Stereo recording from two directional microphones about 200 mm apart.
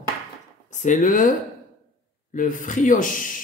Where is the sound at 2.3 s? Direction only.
40° left (ahead or behind).